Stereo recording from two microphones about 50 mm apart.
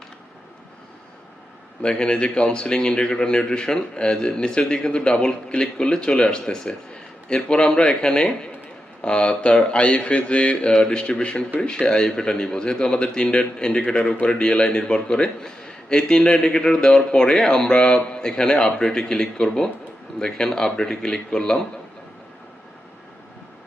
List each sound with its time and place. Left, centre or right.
1.8 s a man's voice: centre